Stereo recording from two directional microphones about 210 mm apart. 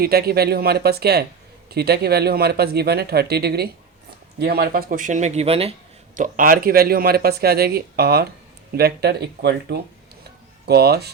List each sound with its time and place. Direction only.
0.0 s speech: 45° right (ahead or behind); by 5.7 s 30° right (ahead or behind)
6.1 s speech: 40° right (ahead or behind)